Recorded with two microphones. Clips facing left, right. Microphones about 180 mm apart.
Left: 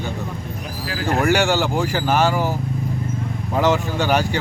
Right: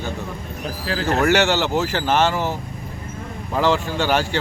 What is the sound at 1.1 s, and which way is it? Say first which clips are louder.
Speech: even; 10° left (ahead or behind).